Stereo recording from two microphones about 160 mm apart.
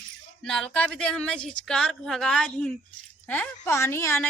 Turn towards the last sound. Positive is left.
turn(degrees=15)  # may be behind; listen again after turning